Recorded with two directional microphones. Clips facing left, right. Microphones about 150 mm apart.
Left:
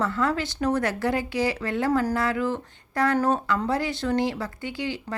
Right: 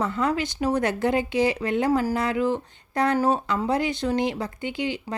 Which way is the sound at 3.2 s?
10° right (ahead or behind).